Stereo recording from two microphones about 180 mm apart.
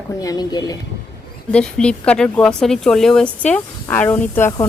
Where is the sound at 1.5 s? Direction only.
5° left (ahead or behind).